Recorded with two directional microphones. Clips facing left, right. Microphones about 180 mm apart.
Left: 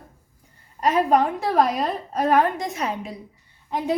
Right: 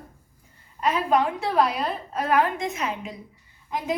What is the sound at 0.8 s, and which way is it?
A woman's voice, 40° left (ahead or behind).